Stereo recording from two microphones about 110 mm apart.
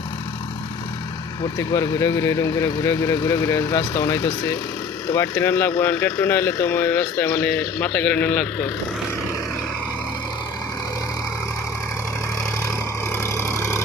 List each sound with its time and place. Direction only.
1.5 s speech: 30° left (ahead or behind); by 8.7 s 10° left (ahead or behind)
12.6 s vehicle: 25° left (ahead or behind)